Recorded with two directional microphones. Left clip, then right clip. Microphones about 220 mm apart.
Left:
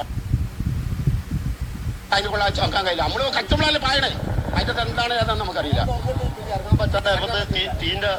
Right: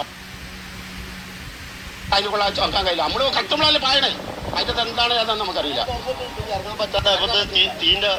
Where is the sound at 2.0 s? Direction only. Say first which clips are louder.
Right 1 dB; 10° right (ahead or behind).